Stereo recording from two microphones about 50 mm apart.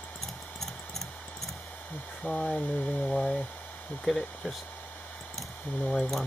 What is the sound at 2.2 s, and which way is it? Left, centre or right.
Speech, centre.